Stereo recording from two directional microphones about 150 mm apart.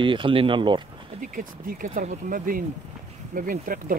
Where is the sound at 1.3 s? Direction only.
65° right (ahead or behind).